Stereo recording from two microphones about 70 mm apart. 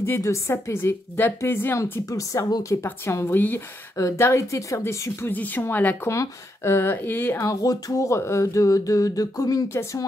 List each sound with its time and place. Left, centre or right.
0.0 s a woman's voice: left
1.8 s speech: left
3.3 s speech: left
3.9 s speech: left
5.3 s speech: left
6.0 s a woman's voice: left
7.3 s humming: left